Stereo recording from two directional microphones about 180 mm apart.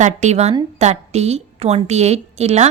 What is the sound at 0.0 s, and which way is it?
A woman's voice, 40° right (ahead or behind).